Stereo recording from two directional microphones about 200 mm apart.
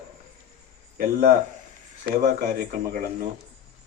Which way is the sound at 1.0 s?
45° right (ahead or behind).